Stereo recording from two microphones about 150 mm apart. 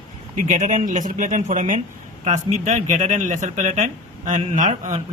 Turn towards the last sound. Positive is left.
turn(degrees=-50)  # may be behind; listen again after turning